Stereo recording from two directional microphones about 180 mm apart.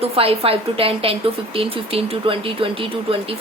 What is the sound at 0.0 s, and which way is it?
A woman's voice, 30° right (ahead or behind).